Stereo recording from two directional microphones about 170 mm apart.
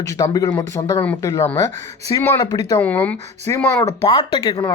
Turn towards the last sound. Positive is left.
turn(degrees=25)  # may be behind; listen again after turning